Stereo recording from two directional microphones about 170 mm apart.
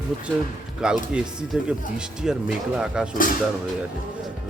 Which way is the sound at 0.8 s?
5° right (ahead or behind).